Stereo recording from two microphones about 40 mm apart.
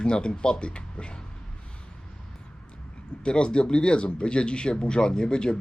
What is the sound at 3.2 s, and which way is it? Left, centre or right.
Speech, left.